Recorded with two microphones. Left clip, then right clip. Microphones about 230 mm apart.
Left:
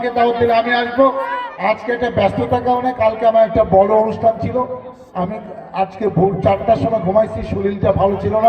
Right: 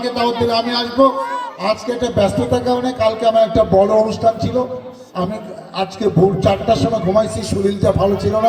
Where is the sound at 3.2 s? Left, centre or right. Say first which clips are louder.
Even; right.